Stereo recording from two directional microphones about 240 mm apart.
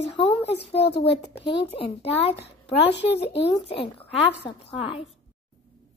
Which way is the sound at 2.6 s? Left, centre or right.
Left.